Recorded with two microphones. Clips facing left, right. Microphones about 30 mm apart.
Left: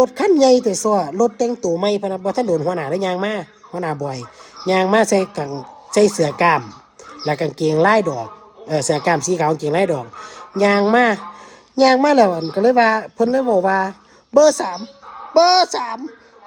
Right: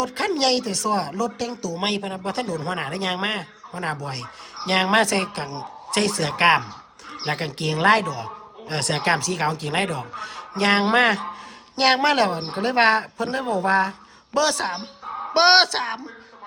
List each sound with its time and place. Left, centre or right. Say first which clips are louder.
0.0 s a man's voice: left 9 dB; right
5.5 s a man's voice: left 3 dB; right